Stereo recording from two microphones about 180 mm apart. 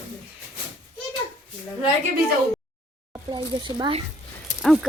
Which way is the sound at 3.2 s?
25° right (ahead or behind).